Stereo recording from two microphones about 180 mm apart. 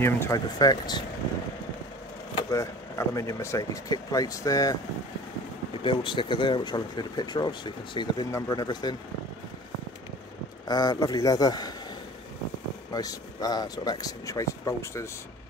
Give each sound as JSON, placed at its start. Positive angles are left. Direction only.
{"t": 0.0, "sound": "speech", "side_deg": 15}
{"t": 2.3, "sound": "speech", "side_deg": 15}
{"t": 5.9, "sound": "speech", "side_deg": 25}
{"t": 10.7, "sound": "speech", "side_deg": 20}
{"t": 12.9, "sound": "speech", "side_deg": 20}